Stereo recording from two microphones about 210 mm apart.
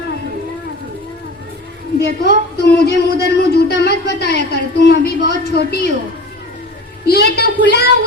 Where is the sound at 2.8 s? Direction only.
50° left (ahead or behind).